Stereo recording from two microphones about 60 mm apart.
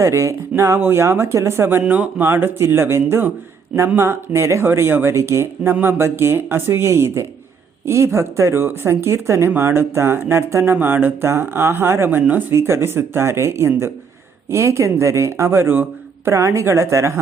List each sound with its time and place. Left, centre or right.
0.0 s speech: right
0.8 s speech: right
1.9 s speech: right
2.2 s speech: right
10.8 s speech: right
16.2 s speech: right